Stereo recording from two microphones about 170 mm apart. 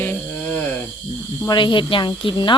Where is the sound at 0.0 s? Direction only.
10° left (ahead or behind).